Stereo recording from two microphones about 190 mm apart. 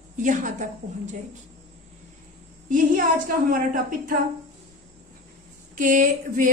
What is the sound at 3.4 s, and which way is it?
Speech, 50° right (ahead or behind).